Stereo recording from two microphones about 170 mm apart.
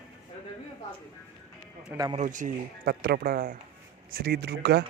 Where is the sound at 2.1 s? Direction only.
45° right (ahead or behind).